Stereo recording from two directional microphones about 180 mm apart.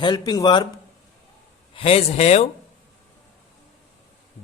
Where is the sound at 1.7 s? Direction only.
35° left (ahead or behind).